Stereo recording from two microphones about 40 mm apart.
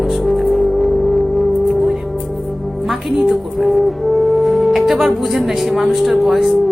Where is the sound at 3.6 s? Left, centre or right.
Centre.